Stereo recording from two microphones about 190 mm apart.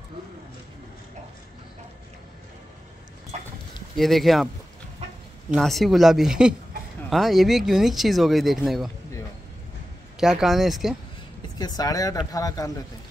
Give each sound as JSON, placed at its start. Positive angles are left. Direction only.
{"t": 3.9, "sound": "speech", "side_deg": 0}
{"t": 5.5, "sound": "speech", "side_deg": 0}
{"t": 10.2, "sound": "speech", "side_deg": 0}
{"t": 11.5, "sound": "speech", "side_deg": 20}